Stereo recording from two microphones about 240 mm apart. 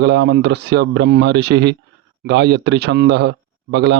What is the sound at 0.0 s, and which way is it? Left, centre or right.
A man's voice, right.